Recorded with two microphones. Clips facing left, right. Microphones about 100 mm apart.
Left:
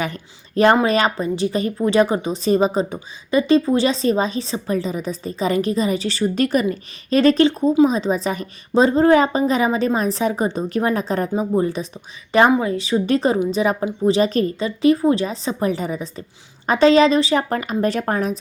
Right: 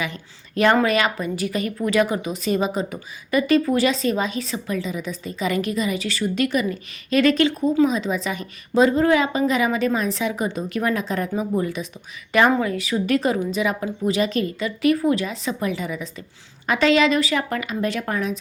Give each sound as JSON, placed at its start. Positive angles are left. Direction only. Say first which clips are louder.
{"t": 0.0, "sound": "a woman's voice", "louder": "left 3 dB", "side_deg": 40}